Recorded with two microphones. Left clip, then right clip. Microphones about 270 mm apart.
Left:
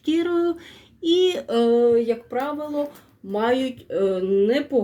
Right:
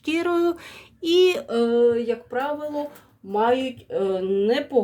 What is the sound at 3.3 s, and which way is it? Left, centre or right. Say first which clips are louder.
Speech: right 1 dB; centre.